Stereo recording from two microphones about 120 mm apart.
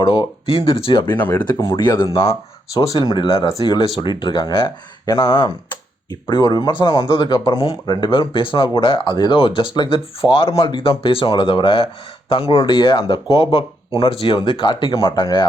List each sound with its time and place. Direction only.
0.0 s speech: 40° left (ahead or behind)
1.5 s speech: 30° left (ahead or behind); by 2.3 s 45° left (ahead or behind)
2.7 s speech: 30° left (ahead or behind)